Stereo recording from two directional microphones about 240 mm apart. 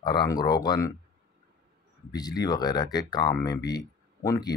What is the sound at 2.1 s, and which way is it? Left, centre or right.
A man's voice, centre.